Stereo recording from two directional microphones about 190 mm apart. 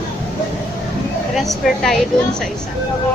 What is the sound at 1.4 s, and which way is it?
A woman's voice, centre (ahead or behind).